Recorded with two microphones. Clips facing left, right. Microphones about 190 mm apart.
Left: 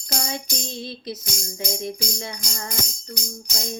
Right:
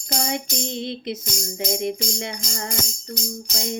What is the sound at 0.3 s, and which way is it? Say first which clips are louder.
Speech: right 4 dB; 20° right (ahead or behind).